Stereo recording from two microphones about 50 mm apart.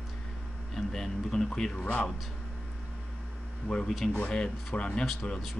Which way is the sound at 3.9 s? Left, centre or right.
Centre.